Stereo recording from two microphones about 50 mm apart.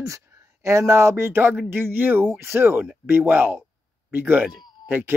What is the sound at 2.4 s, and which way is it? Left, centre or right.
Speech, right.